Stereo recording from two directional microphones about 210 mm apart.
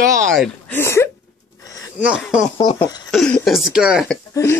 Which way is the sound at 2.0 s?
5° right (ahead or behind).